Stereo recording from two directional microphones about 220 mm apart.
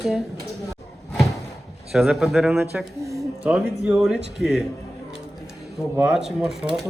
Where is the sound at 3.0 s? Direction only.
15° right (ahead or behind).